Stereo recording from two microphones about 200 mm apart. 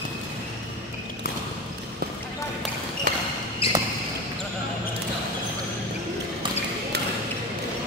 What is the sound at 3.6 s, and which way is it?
Basketball bounce, 30° left (ahead or behind).